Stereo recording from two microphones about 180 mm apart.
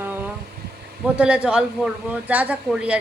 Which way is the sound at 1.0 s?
5° right (ahead or behind).